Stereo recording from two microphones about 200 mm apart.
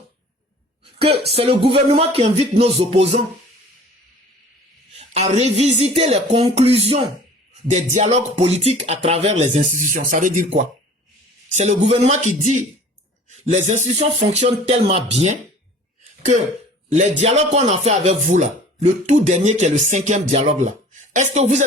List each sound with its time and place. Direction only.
0.9 s music: 30° right (ahead or behind)
1.3 s speech: 30° right (ahead or behind)
4.9 s speech: 35° right (ahead or behind)
16.9 s speech: 35° right (ahead or behind)